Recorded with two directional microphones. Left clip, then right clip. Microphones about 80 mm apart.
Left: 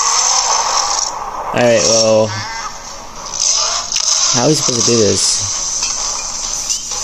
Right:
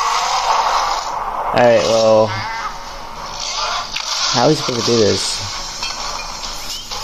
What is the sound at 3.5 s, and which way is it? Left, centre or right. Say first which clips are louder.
Music: left 2 dB; left.